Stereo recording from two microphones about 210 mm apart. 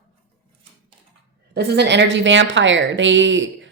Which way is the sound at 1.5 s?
50° right (ahead or behind).